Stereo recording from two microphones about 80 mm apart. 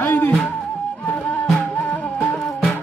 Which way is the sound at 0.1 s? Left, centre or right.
Left.